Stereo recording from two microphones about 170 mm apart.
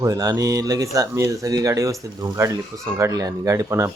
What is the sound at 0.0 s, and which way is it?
Speech, 20° right (ahead or behind).